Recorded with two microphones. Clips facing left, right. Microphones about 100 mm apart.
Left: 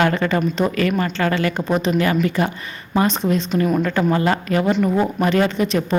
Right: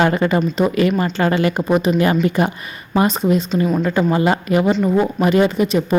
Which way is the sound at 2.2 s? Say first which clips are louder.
Right 3 dB; 20° right (ahead or behind).